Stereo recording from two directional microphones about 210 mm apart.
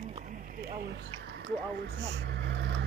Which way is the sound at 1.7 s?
55° right (ahead or behind).